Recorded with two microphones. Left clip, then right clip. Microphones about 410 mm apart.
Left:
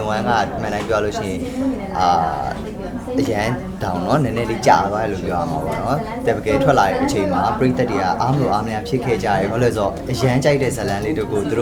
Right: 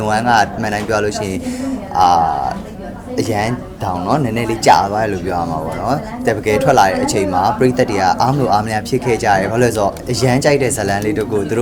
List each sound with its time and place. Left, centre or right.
0.0 s speech: right